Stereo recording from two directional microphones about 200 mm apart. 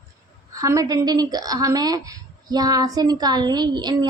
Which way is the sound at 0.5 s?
15° right (ahead or behind).